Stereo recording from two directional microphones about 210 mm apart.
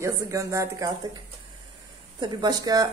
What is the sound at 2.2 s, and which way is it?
Speech, 20° right (ahead or behind).